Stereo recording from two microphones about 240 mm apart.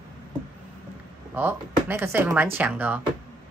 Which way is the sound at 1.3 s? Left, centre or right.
Centre.